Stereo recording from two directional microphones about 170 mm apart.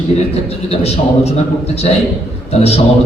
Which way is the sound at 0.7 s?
35° left (ahead or behind).